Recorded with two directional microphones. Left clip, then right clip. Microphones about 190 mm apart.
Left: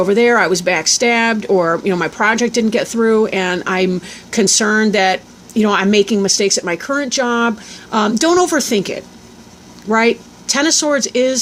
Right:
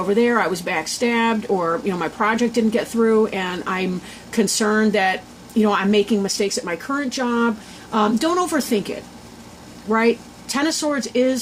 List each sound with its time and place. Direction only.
0.1 s speech: 45° left (ahead or behind)